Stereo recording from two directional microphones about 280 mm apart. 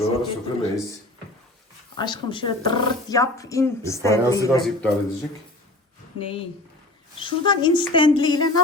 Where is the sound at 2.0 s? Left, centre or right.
Centre.